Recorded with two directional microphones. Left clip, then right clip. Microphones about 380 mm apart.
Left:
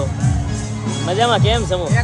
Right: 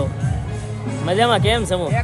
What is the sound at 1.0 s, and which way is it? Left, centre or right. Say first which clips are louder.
Music: even; centre.